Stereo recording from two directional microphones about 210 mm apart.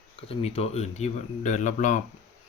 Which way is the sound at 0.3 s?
30° left (ahead or behind).